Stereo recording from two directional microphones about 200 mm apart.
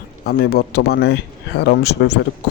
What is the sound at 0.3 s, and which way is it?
Speech, 50° left (ahead or behind).